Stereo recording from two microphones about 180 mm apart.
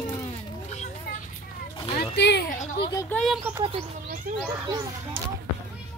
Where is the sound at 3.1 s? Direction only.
Centre (ahead or behind).